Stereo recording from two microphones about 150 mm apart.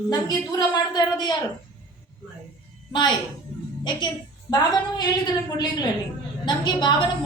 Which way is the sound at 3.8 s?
30° left (ahead or behind).